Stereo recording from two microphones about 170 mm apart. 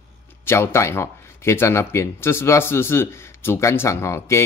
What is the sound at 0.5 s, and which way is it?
Speech, 15° left (ahead or behind).